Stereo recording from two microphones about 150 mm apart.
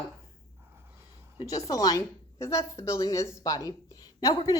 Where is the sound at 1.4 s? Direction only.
25° left (ahead or behind).